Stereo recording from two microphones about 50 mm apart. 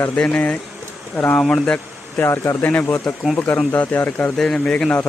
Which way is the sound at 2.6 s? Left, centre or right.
Left.